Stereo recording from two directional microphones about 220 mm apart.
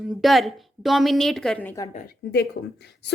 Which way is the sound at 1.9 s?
40° left (ahead or behind).